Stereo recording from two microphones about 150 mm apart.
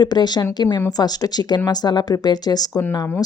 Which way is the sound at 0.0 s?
30° left (ahead or behind).